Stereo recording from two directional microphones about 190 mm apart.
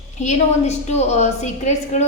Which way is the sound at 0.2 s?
35° left (ahead or behind).